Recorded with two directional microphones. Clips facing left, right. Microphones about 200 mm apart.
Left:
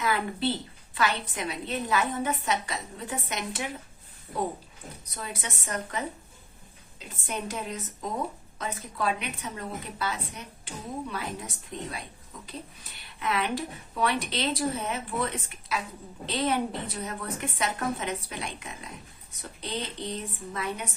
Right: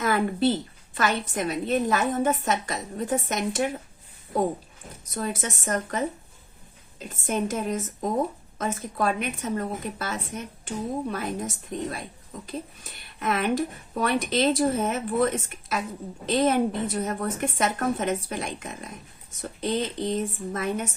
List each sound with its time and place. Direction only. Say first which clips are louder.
0.0 s speech: right 5 dB; 45° right (ahead or behind)
5.1 s speech: right 8 dB; 45° right (ahead or behind)
7.3 s speech: right 7 dB; 45° right (ahead or behind)